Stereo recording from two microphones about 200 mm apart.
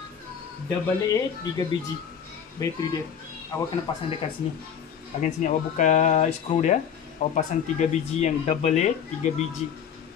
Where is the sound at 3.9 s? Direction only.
20° left (ahead or behind).